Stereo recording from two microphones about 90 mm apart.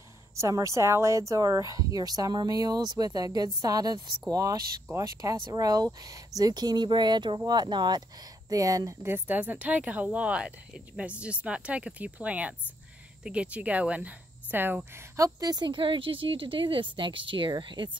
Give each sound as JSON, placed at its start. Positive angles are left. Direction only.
{"t": 0.4, "sound": "a woman's voice", "side_deg": -35}
{"t": 8.5, "sound": "a woman's voice", "side_deg": -40}
{"t": 9.1, "sound": "speech", "side_deg": -20}
{"t": 15.1, "sound": "speech", "side_deg": -45}